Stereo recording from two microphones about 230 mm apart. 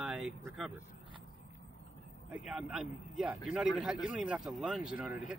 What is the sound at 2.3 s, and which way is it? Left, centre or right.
Speech, centre.